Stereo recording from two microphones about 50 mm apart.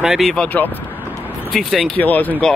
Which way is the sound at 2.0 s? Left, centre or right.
Left.